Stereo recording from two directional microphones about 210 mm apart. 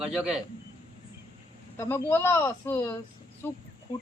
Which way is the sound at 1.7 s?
10° left (ahead or behind).